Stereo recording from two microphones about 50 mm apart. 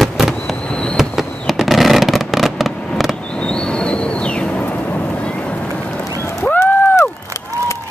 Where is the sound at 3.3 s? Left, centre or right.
Centre.